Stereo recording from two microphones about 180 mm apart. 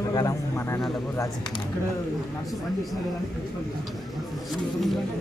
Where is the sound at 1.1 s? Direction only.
20° left (ahead or behind).